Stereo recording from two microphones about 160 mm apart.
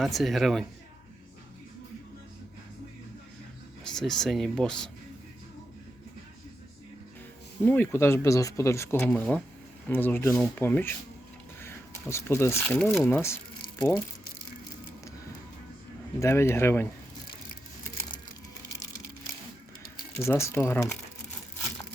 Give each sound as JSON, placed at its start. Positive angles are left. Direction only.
{"t": 0.0, "sound": "speech", "side_deg": 0}
{"t": 3.8, "sound": "speech", "side_deg": 5}
{"t": 7.6, "sound": "speech", "side_deg": 10}
{"t": 16.2, "sound": "speech", "side_deg": 15}
{"t": 20.1, "sound": "speech", "side_deg": 15}